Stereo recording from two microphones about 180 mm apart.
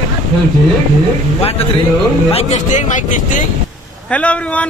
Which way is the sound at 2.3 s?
40° left (ahead or behind).